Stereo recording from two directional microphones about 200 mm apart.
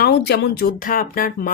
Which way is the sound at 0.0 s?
55° left (ahead or behind).